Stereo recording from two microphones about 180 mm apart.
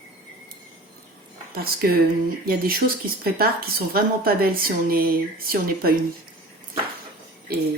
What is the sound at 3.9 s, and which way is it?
Speech, 55° right (ahead or behind).